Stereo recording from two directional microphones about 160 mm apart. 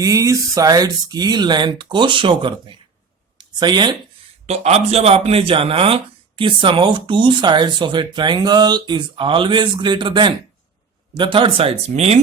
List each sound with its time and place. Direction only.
0.0 s speech: 20° right (ahead or behind)
4.4 s speech: 40° right (ahead or behind)